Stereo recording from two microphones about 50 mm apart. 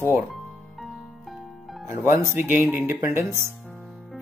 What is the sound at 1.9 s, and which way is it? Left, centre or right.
Speech, right.